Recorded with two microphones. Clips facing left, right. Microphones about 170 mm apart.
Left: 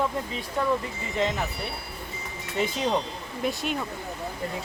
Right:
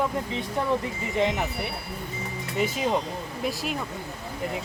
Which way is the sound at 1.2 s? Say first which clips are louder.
Right 2 dB; 15° right (ahead or behind).